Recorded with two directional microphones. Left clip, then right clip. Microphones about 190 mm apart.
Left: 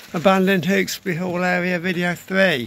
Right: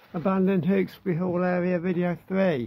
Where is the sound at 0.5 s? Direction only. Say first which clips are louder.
Left 6 dB; centre (ahead or behind).